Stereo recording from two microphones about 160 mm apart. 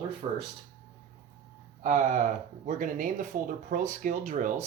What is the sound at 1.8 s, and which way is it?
Speech, 50° right (ahead or behind).